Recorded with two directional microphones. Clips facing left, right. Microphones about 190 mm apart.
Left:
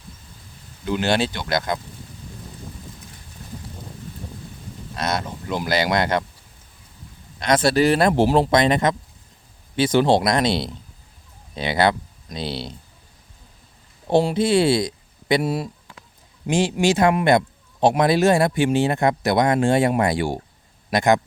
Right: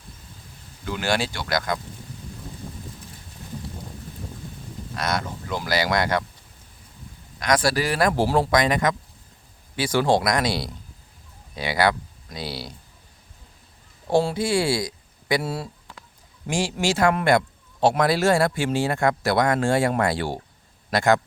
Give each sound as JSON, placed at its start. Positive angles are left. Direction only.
{"t": 0.9, "sound": "a man's voice", "side_deg": 20}
{"t": 4.9, "sound": "a man's voice", "side_deg": 20}
{"t": 7.3, "sound": "a man's voice", "side_deg": 25}
{"t": 14.1, "sound": "a man's voice", "side_deg": 20}